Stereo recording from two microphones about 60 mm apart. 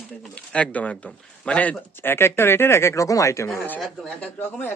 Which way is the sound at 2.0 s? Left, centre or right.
Left.